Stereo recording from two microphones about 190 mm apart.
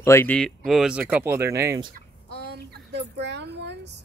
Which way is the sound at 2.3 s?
60° right (ahead or behind).